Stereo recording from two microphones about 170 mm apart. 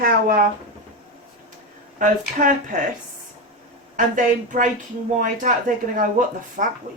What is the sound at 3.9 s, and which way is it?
Speech, 50° right (ahead or behind).